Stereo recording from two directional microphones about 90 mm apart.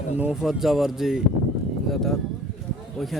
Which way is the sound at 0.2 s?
10° right (ahead or behind).